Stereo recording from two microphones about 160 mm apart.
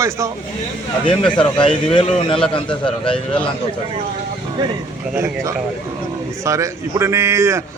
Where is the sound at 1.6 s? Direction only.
35° left (ahead or behind).